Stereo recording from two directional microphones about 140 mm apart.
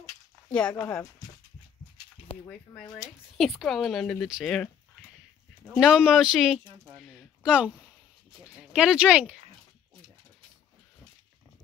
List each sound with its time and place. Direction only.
0.5 s speech: 5° left (ahead or behind)
2.3 s speech: 40° left (ahead or behind)
3.3 s speech: centre (ahead or behind)
5.8 s speech: 5° right (ahead or behind)